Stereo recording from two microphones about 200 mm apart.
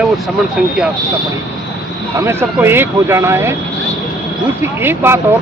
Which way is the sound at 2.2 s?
10° right (ahead or behind).